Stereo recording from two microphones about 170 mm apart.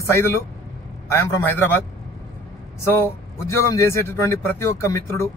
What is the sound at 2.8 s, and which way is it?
A man's voice, 15° left (ahead or behind).